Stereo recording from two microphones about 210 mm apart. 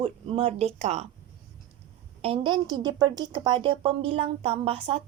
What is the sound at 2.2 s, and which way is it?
A woman's voice, 25° right (ahead or behind).